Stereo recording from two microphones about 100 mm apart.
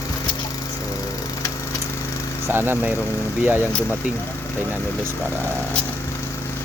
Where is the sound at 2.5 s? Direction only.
20° right (ahead or behind).